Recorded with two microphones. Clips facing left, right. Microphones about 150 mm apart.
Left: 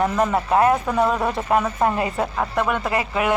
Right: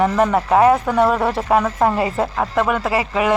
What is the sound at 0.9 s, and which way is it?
Speech, centre (ahead or behind).